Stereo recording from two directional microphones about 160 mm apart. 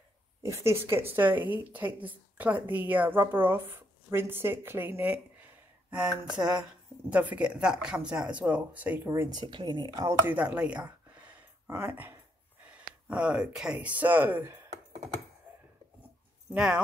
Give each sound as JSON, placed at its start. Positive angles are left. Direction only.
{"t": 0.4, "sound": "a woman's voice", "side_deg": -20}
{"t": 10.2, "sound": "a sound", "side_deg": -10}
{"t": 13.1, "sound": "a woman's voice", "side_deg": -5}
{"t": 16.5, "sound": "speech", "side_deg": -5}